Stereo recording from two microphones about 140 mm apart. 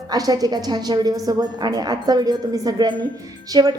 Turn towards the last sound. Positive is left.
turn(degrees=-30)  # may be behind; listen again after turning